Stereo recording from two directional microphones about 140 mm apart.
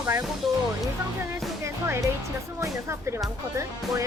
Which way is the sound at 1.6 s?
20° right (ahead or behind).